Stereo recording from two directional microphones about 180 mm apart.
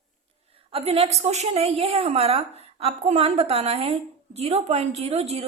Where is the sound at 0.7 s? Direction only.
35° right (ahead or behind).